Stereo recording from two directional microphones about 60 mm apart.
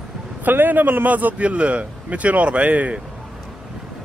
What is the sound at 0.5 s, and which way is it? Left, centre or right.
Speech, right.